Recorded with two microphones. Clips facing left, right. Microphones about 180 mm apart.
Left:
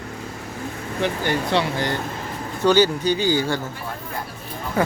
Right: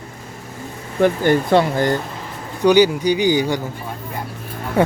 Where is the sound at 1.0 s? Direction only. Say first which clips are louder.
Right 8 dB; 50° right (ahead or behind).